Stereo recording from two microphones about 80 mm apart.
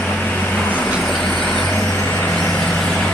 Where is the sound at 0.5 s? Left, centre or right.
Centre.